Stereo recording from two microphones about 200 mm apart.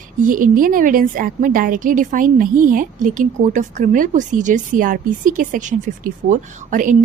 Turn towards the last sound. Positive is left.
turn(degrees=-40)  # may be behind; listen again after turning